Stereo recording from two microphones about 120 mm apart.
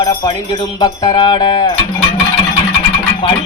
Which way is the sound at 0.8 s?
40° left (ahead or behind).